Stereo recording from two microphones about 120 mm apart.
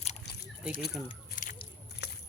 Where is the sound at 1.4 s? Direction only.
90° left.